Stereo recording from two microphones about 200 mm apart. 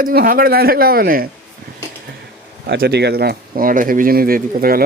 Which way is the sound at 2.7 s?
55° right (ahead or behind).